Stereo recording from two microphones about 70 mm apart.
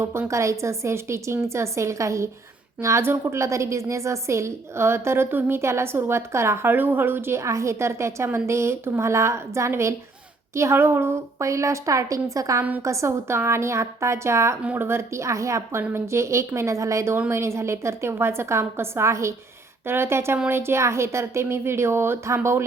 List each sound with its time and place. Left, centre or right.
0.0 s a woman's voice: right
15.8 s a woman's voice: right